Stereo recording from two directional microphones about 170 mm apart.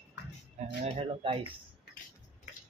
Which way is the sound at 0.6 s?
30° right (ahead or behind).